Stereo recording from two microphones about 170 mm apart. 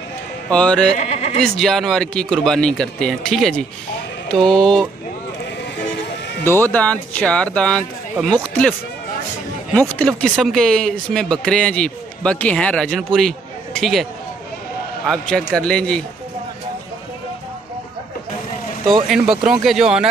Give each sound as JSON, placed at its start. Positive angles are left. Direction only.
{"t": 0.5, "sound": "speech", "side_deg": 5}
{"t": 0.9, "sound": "speech", "side_deg": 40}
{"t": 1.4, "sound": "speech", "side_deg": 0}
{"t": 6.4, "sound": "speech", "side_deg": 15}
{"t": 9.8, "sound": "speech", "side_deg": 5}
{"t": 15.0, "sound": "speech", "side_deg": 5}
{"t": 19.0, "sound": "speech", "side_deg": 0}